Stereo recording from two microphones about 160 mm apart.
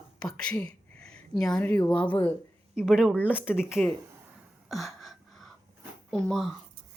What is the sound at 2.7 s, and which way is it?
Speech, 5° right (ahead or behind).